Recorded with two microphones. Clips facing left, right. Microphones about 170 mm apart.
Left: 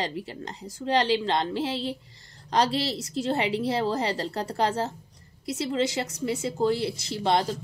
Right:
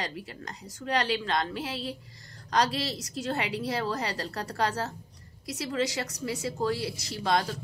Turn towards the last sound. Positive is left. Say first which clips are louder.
# left 3 dB
turn(degrees=25)  # may be behind; listen again after turning